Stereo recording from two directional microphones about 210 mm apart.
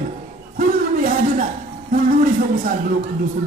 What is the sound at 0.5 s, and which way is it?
Speech, 40° right (ahead or behind).